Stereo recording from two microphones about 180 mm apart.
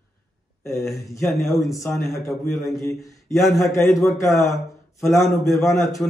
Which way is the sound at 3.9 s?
15° left (ahead or behind).